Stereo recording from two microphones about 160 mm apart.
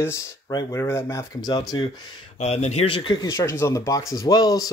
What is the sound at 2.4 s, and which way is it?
Speech, 45° left (ahead or behind).